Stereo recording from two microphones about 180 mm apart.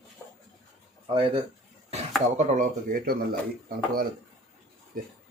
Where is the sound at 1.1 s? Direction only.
30° right (ahead or behind).